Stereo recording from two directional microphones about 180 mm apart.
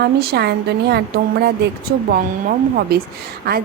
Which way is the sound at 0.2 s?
65° right (ahead or behind).